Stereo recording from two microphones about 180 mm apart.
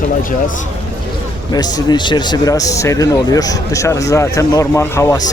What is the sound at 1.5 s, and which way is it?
Speech, 25° left (ahead or behind).